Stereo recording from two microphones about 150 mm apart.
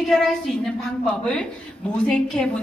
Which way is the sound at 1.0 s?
5° left (ahead or behind).